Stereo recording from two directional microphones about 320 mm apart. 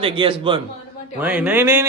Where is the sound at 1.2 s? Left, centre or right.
Centre.